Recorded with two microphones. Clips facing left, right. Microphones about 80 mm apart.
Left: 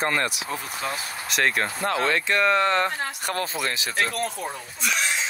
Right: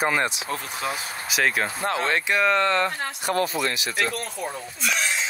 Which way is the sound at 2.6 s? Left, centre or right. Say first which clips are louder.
Even; left.